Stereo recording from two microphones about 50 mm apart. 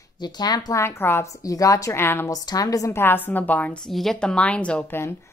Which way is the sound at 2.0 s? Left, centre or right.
Left.